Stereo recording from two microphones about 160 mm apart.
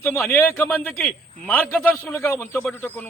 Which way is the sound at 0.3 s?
15° left (ahead or behind).